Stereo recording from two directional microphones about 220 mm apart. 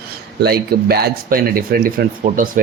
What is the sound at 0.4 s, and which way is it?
Speech, 45° right (ahead or behind).